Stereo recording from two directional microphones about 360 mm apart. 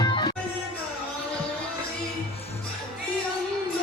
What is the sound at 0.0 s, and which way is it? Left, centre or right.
Music, centre.